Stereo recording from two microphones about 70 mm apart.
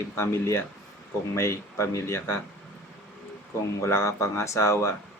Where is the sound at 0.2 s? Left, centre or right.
Left.